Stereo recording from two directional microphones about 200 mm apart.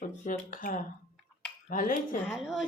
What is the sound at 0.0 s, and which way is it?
Speech, 40° left (ahead or behind).